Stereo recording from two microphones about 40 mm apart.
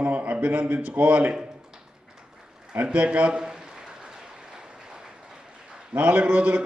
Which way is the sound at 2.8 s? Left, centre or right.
Right.